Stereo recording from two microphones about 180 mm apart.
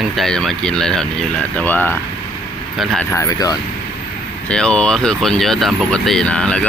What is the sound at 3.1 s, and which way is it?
Speech, 20° left (ahead or behind).